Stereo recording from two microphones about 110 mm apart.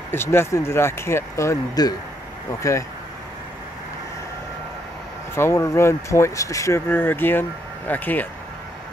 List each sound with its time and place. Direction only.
0.1 s speech: 20° left (ahead or behind)
5.3 s speech: 25° left (ahead or behind)